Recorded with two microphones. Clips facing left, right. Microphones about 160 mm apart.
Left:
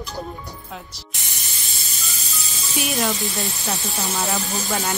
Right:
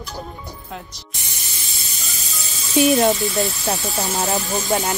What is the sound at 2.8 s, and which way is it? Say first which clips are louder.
Speech: right 11 dB; 25° right (ahead or behind).